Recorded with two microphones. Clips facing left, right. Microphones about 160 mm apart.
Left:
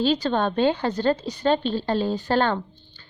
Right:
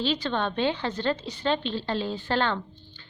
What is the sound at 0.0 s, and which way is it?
A woman's voice, 40° left (ahead or behind).